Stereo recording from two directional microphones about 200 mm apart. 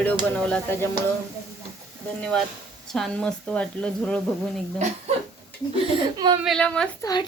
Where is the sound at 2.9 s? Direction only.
5° left (ahead or behind).